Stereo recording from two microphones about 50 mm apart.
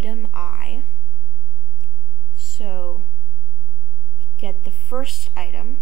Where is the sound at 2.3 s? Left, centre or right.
Centre.